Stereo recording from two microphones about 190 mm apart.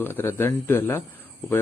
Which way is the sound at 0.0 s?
10° left (ahead or behind).